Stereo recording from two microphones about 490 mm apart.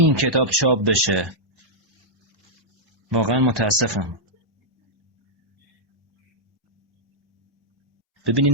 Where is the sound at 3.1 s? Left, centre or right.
Right.